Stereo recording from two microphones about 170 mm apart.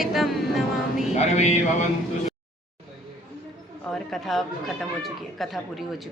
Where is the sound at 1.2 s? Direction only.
40° left (ahead or behind).